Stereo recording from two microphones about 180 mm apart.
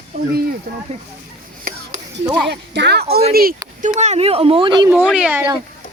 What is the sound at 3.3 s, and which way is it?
Speech, 55° right (ahead or behind).